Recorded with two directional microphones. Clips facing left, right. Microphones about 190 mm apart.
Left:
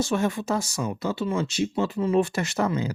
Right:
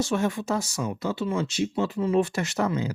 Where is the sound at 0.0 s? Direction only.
35° left (ahead or behind).